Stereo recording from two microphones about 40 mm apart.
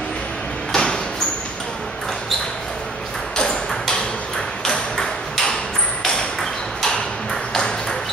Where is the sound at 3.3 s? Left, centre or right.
Centre.